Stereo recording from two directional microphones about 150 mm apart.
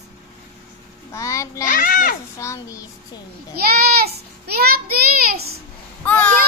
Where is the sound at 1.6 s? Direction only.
70° left (ahead or behind).